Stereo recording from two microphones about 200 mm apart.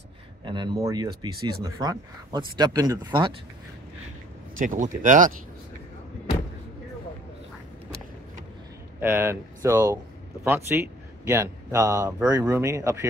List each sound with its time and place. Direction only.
0.5 s speech: 20° right (ahead or behind)
4.6 s speech: 40° right (ahead or behind)
9.0 s a man's voice: 10° right (ahead or behind)